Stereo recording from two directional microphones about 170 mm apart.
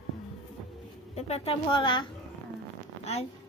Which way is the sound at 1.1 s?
35° left (ahead or behind).